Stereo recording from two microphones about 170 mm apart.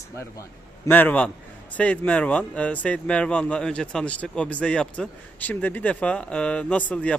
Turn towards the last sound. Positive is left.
turn(degrees=10)  # may be behind; listen again after turning